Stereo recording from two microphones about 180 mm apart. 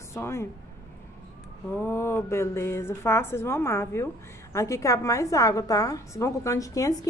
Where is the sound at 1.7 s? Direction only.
15° left (ahead or behind).